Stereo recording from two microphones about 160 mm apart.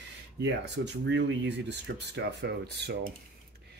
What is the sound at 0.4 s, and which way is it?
Speech, 90° right.